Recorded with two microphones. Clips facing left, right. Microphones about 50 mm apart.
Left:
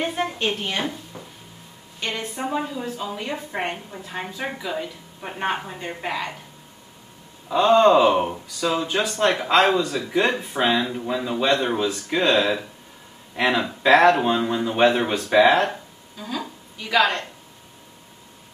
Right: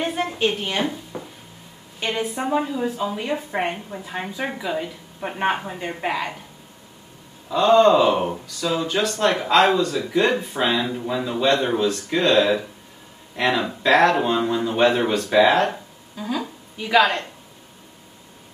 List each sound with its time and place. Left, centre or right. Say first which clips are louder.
0.0 s a woman's voice: right 2 dB; centre
1.1 s a sound: right 6 dB; right
2.0 s a woman's voice: right 4 dB; centre
7.4 s a woman's voice: right 1 dB; centre
13.4 s speech: even; centre
15.7 s a sound: right 1 dB; centre